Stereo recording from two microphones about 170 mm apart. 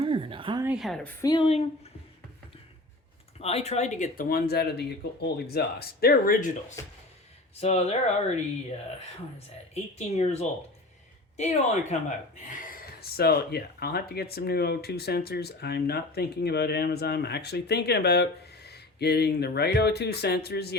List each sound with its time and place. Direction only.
0.0 s a sound: 30° right (ahead or behind)
0.6 s a woman's voice: 5° right (ahead or behind)
1.2 s speech: 25° left (ahead or behind)
1.5 s speech: 35° left (ahead or behind)
3.4 s speech: 40° left (ahead or behind)
7.6 s speech: 40° left (ahead or behind)
9.7 s speech: 40° left (ahead or behind); by 20.7 s 70° left (ahead or behind)